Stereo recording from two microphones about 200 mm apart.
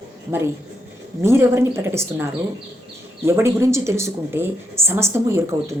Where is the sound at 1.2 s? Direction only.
15° right (ahead or behind).